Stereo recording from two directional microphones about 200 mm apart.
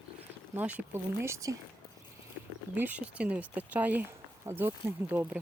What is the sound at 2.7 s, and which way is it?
Speech, 10° right (ahead or behind).